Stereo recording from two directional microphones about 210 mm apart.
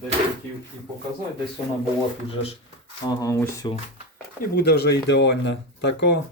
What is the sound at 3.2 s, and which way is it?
Speech, 15° left (ahead or behind).